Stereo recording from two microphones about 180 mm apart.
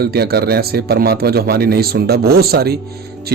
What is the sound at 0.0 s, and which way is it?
A man's voice, 60° right (ahead or behind).